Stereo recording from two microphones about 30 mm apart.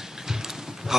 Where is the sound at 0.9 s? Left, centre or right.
Centre.